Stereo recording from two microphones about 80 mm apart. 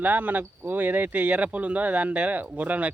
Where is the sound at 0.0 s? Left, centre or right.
Right.